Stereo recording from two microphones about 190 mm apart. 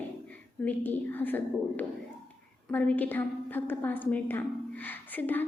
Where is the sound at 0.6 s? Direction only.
10° left (ahead or behind).